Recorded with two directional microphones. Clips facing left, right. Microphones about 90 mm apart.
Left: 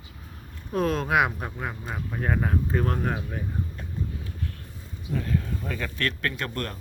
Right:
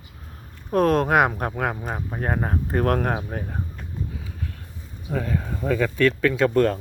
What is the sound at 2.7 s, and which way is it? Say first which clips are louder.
Speech: right 5 dB; 60° right (ahead or behind).